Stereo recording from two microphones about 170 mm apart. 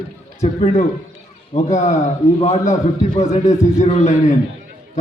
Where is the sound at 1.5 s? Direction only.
40° left (ahead or behind).